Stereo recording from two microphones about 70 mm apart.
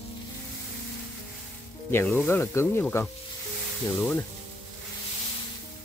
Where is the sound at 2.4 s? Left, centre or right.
Left.